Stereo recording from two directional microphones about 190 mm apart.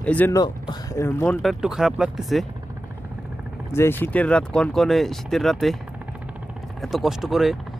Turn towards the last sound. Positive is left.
turn(degrees=0)  # may be behind; listen again after turning